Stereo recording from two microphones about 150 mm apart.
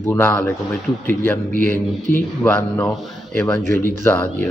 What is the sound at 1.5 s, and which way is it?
Speech, 60° right (ahead or behind).